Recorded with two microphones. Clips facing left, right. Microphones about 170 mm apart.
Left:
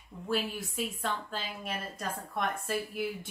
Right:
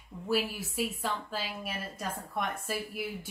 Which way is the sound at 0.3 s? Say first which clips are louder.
Right 2 dB; 5° right (ahead or behind).